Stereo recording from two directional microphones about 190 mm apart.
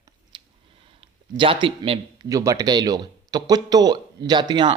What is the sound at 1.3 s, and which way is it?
Speech, 25° right (ahead or behind).